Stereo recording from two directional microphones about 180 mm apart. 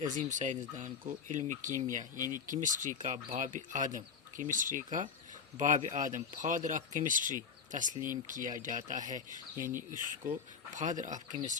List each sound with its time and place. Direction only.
0.1 s speech: 45° right (ahead or behind)
2.1 s speech: 20° left (ahead or behind)
2.5 s speech: 45° right (ahead or behind)